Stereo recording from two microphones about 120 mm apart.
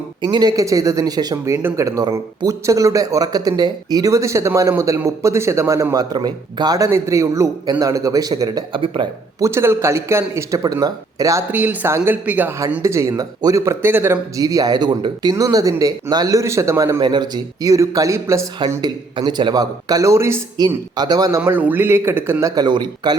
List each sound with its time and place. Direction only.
0.2 s speech: 40° right (ahead or behind)
9.4 s speech: 20° right (ahead or behind)
11.5 s speech: 15° right (ahead or behind)
17.0 s speech: 40° right (ahead or behind)
22.6 s speech: 35° right (ahead or behind)